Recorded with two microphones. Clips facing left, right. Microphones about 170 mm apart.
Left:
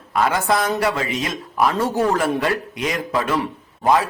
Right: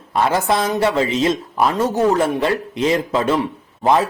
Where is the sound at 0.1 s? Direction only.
25° right (ahead or behind).